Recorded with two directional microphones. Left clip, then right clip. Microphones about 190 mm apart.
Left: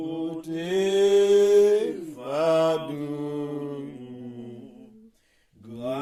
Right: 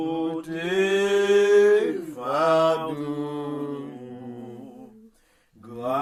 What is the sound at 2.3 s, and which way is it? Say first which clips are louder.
Mantra: right 2 dB; 50° left (ahead or behind).